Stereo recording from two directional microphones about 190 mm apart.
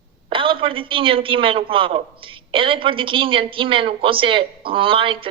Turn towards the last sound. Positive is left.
turn(degrees=-25)  # may be behind; listen again after turning